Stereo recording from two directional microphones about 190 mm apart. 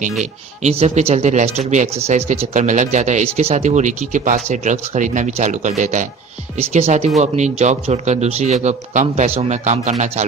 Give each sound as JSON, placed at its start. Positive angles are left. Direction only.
{"t": 0.6, "sound": "speech", "side_deg": -35}